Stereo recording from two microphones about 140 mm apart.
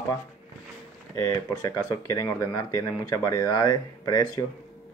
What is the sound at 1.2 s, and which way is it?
Speech, 25° left (ahead or behind).